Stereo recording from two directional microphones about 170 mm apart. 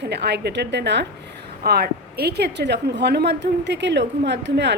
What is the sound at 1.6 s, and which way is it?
A woman's voice, 65° right (ahead or behind).